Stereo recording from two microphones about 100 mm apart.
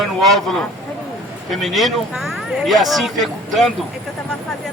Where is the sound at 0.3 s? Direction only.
5° left (ahead or behind).